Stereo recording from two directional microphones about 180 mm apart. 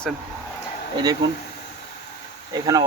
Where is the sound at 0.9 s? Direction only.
25° right (ahead or behind).